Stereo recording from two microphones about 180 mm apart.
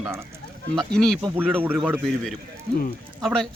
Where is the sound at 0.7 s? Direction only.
Centre (ahead or behind).